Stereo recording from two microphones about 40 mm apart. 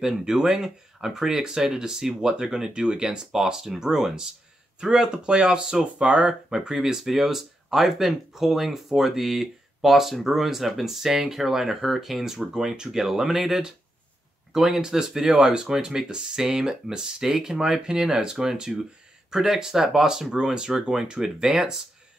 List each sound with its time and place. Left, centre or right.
0.0 s speech: centre
6.5 s speech: centre